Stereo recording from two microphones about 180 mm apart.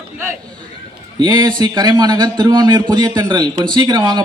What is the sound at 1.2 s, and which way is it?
Speech, 25° right (ahead or behind).